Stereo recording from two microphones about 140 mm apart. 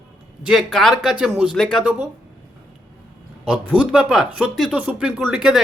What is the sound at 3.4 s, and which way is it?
Speech, 5° right (ahead or behind).